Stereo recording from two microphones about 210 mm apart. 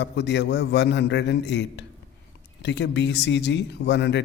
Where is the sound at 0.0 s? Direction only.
55° left (ahead or behind).